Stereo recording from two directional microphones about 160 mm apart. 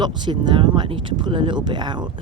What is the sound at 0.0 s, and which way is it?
Speech, 30° right (ahead or behind).